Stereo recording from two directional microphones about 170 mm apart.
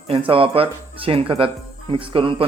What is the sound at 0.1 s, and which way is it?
Speech, 30° right (ahead or behind).